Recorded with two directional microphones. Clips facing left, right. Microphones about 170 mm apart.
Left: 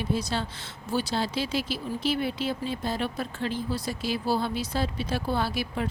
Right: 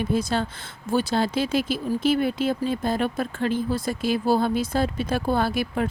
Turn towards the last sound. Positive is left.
turn(degrees=-50)  # may be behind; listen again after turning